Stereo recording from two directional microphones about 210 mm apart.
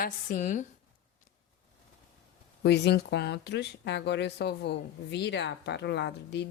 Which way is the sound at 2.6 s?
55° left (ahead or behind).